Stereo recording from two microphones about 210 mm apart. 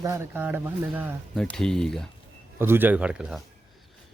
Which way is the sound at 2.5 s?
10° right (ahead or behind).